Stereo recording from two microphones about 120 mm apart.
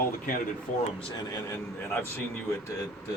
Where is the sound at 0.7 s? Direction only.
90° left.